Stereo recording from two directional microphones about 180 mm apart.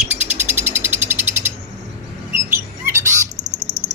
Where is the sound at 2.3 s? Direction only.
15° right (ahead or behind).